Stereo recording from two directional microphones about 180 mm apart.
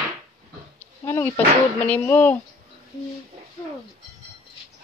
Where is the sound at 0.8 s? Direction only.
10° left (ahead or behind).